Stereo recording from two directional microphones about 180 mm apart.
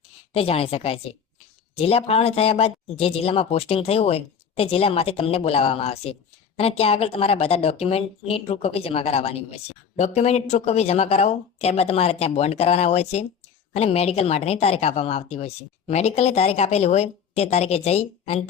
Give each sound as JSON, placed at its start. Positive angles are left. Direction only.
{"t": 0.3, "sound": "a woman's voice", "side_deg": 35}